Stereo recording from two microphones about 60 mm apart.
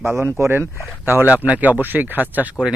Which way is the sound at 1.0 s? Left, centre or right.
Right.